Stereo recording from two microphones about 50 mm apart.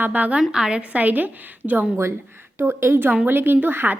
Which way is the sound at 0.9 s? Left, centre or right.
Right.